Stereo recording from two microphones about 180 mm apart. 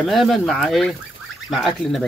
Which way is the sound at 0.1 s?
Centre (ahead or behind).